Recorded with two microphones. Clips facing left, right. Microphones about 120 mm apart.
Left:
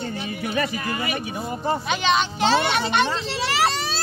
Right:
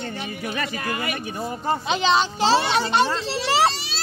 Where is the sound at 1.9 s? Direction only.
30° right (ahead or behind).